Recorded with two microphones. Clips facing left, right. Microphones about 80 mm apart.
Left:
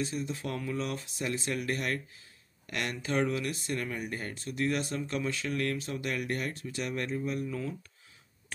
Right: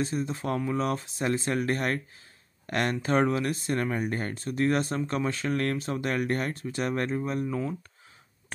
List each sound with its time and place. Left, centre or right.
0.0 s speech: right